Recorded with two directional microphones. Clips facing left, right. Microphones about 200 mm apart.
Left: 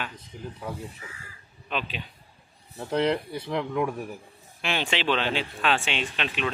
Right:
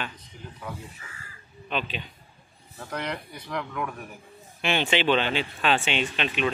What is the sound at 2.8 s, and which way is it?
Speech, 30° left (ahead or behind).